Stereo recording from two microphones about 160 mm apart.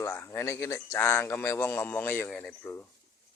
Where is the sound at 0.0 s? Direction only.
15° left (ahead or behind).